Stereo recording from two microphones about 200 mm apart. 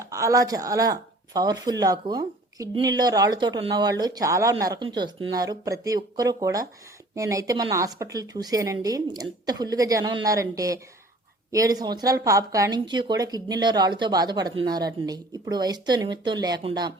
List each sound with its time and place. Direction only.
0.1 s a woman's voice: 15° right (ahead or behind)